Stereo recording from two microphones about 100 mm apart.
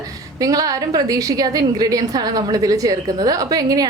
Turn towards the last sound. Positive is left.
turn(degrees=-40)  # may be behind; listen again after turning